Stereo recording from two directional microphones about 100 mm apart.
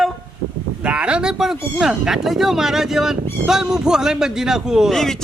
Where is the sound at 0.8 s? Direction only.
10° right (ahead or behind).